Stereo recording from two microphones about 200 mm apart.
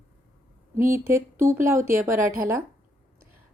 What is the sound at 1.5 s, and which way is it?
Speech, 15° right (ahead or behind).